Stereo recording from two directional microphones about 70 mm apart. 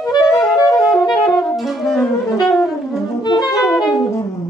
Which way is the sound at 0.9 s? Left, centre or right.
Centre.